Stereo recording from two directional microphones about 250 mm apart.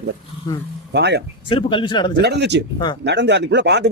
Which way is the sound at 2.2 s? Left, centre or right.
Right.